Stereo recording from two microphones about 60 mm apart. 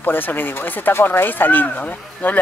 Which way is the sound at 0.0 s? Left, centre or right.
Left.